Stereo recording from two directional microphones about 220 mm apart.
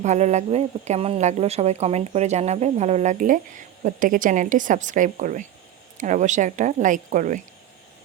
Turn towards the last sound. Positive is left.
turn(degrees=-35)  # may be behind; listen again after turning